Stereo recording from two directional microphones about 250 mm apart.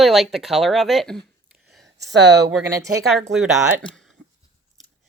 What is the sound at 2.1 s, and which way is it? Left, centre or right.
Speech, right.